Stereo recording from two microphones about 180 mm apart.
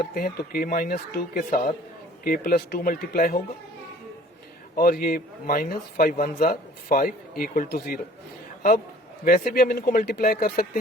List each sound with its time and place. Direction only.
0.0 s speech: 55° left (ahead or behind)
4.7 s speech: 55° left (ahead or behind)
9.2 s speech: 50° left (ahead or behind)